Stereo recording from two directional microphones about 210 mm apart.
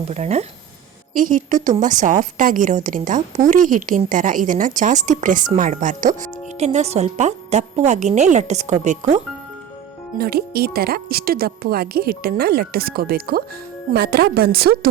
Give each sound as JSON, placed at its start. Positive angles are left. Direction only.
{"t": 0.1, "sound": "a woman's voice", "side_deg": -30}
{"t": 10.2, "sound": "speech", "side_deg": -45}